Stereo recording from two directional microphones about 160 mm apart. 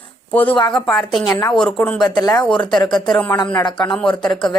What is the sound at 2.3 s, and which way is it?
Speech, 5° left (ahead or behind).